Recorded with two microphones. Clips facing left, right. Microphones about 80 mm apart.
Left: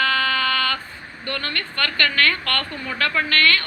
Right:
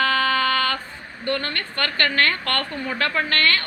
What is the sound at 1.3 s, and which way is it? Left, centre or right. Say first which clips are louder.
A woman's voice: right 3 dB; right.